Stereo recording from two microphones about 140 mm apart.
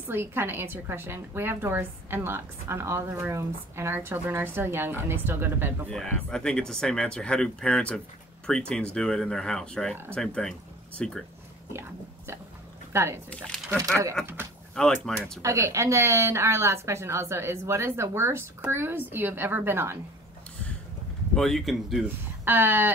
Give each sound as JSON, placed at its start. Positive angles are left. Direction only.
{"t": 0.1, "sound": "a woman's voice", "side_deg": -15}
{"t": 5.9, "sound": "speech", "side_deg": 5}
{"t": 11.7, "sound": "a sound", "side_deg": -15}
{"t": 12.9, "sound": "speech", "side_deg": -20}
{"t": 14.2, "sound": "a woman's voice", "side_deg": -15}
{"t": 15.1, "sound": "speech", "side_deg": 5}
{"t": 15.4, "sound": "a woman's voice", "side_deg": -20}
{"t": 21.4, "sound": "speech", "side_deg": 0}
{"t": 22.0, "sound": "a woman's voice", "side_deg": -15}